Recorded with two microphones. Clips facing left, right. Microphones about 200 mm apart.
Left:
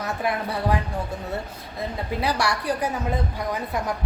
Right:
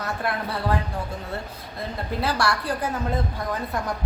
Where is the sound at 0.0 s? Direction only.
15° left (ahead or behind).